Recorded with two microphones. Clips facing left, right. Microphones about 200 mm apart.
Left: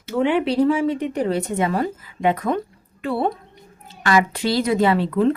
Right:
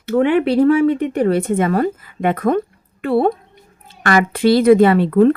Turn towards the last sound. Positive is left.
turn(degrees=-60)  # may be behind; listen again after turning